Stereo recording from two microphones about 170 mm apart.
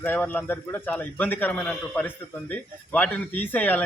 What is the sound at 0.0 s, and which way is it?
A man's voice, 10° left (ahead or behind).